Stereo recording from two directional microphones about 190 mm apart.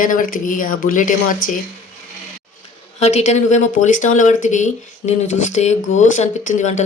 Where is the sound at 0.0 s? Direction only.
45° left (ahead or behind).